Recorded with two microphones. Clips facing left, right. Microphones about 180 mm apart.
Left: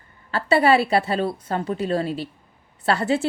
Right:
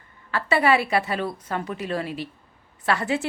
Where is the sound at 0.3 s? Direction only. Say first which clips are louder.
Left 3 dB; 30° left (ahead or behind).